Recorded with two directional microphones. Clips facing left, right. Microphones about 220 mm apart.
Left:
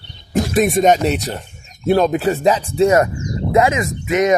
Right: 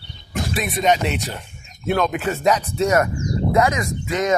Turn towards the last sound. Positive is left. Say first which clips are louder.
# left 5 dB
turn(degrees=20)  # may be behind; listen again after turning